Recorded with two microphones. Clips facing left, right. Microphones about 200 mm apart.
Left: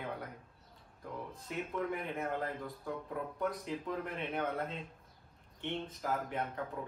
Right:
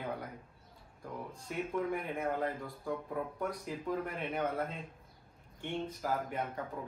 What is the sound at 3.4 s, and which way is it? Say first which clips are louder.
A man's voice: left 1 dB; 5° right (ahead or behind).